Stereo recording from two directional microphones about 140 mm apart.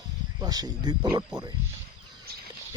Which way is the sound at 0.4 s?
30° right (ahead or behind).